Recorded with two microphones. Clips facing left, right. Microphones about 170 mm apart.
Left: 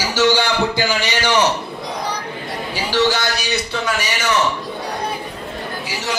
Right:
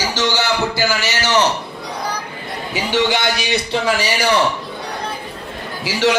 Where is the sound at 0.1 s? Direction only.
10° left (ahead or behind).